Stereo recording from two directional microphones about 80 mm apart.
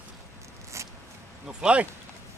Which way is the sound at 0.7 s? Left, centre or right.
Right.